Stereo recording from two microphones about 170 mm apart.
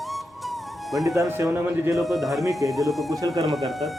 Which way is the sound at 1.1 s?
15° right (ahead or behind).